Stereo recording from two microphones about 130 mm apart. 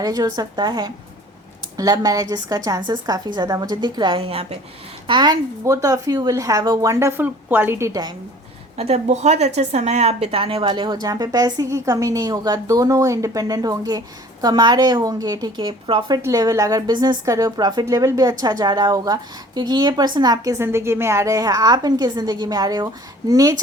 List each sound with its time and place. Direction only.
0.0 s a woman's voice: 30° right (ahead or behind); by 4.5 s 50° right (ahead or behind)
5.0 s a woman's voice: 35° right (ahead or behind)
8.7 s a woman's voice: 55° right (ahead or behind); by 16.2 s 35° right (ahead or behind)
16.2 s a woman's voice: 25° right (ahead or behind)